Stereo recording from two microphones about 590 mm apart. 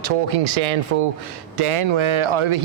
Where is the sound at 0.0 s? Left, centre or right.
Right.